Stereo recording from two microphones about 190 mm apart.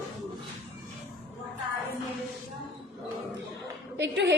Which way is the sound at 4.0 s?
65° right (ahead or behind).